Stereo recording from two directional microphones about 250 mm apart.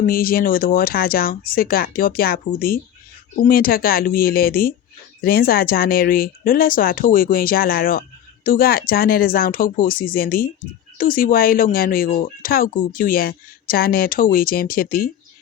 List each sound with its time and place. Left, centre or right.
0.0 s speech: left